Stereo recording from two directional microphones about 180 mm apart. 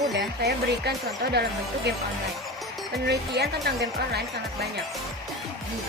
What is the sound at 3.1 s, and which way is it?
Speech, 65° right (ahead or behind).